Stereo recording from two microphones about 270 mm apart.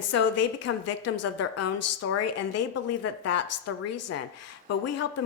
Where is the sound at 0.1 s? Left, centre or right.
Left.